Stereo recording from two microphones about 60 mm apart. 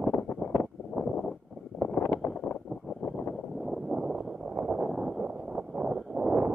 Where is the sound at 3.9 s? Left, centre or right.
Centre.